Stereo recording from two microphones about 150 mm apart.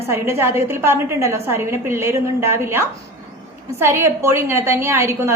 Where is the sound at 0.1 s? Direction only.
15° right (ahead or behind).